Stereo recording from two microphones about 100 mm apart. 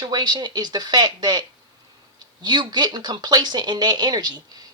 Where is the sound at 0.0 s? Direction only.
45° right (ahead or behind).